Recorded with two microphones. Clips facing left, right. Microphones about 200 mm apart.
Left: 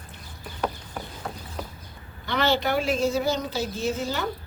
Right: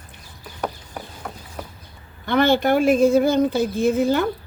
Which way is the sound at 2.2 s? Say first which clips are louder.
Right 7 dB; 50° right (ahead or behind).